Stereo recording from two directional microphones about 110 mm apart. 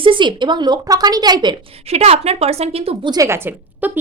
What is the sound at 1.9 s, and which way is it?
A woman's voice, 70° right (ahead or behind).